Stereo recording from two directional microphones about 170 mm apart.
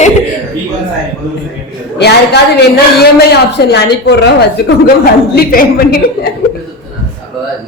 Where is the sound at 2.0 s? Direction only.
75° left (ahead or behind).